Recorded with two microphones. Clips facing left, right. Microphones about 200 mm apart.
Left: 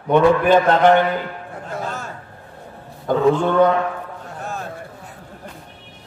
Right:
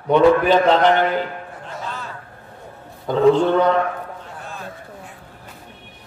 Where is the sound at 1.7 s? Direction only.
45° left (ahead or behind).